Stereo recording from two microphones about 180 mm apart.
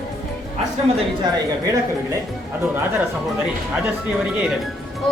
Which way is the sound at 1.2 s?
20° right (ahead or behind).